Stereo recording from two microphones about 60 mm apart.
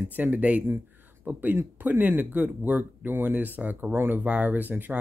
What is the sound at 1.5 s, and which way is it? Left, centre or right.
Speech, right.